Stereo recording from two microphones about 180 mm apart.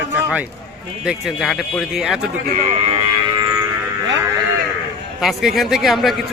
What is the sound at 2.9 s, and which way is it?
Cattle, 25° right (ahead or behind).